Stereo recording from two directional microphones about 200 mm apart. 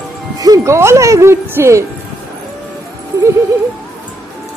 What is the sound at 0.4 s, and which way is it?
Speech, 15° right (ahead or behind).